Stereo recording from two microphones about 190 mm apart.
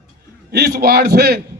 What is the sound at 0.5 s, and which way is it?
Speech, 55° right (ahead or behind).